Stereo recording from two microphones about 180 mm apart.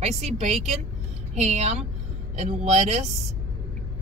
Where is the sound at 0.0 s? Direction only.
40° right (ahead or behind).